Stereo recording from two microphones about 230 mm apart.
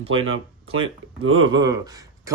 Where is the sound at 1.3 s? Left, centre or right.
Centre.